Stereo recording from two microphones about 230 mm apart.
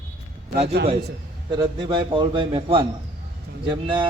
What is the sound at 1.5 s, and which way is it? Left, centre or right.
A man's voice, centre.